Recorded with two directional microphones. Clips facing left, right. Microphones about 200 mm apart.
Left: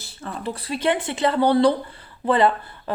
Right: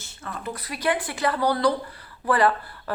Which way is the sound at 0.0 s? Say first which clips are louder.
Left 4 dB; 35° left (ahead or behind).